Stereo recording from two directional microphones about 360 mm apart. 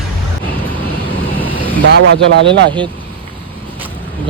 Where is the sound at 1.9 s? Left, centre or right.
Right.